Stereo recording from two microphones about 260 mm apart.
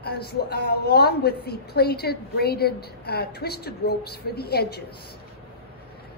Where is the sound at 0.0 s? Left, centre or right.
Left.